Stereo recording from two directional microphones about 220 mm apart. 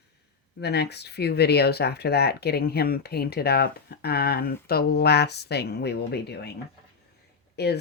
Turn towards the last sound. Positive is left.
turn(degrees=45)  # may be behind; listen again after turning